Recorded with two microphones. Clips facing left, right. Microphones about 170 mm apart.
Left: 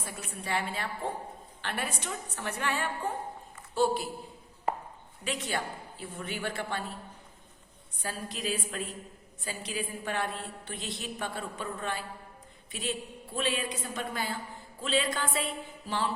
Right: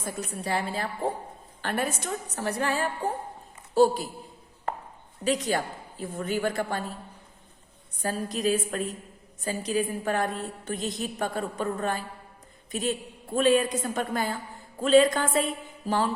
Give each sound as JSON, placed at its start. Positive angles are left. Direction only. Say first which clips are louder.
{"t": 0.0, "sound": "a woman's voice", "louder": "right 7 dB", "side_deg": -40}
{"t": 5.2, "sound": "a woman's voice", "louder": "right 7 dB", "side_deg": -40}
{"t": 8.0, "sound": "a woman's voice", "louder": "right 8 dB", "side_deg": -45}